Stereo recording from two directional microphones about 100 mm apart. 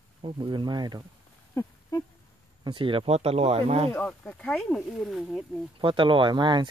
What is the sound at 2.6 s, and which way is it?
Speech, 55° right (ahead or behind).